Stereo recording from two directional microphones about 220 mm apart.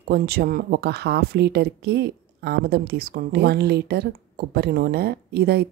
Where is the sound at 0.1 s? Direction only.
45° right (ahead or behind).